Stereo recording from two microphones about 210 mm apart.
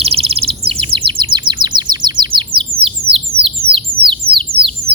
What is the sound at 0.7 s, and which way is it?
Chirp, 25° right (ahead or behind).